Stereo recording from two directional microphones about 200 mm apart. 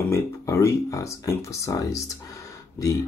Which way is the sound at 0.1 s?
15° left (ahead or behind).